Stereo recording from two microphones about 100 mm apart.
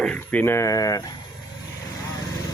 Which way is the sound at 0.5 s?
30° left (ahead or behind).